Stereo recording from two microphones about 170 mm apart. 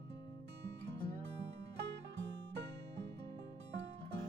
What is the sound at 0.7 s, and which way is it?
Music, 90° right.